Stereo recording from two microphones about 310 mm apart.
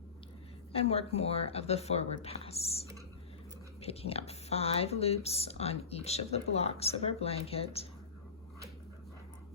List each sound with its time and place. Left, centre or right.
0.7 s speech: centre